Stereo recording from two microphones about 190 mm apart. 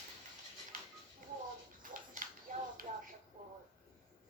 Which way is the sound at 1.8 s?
45° right (ahead or behind).